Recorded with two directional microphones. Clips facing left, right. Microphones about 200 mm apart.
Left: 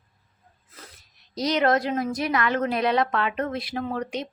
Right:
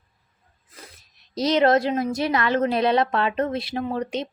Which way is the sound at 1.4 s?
25° right (ahead or behind).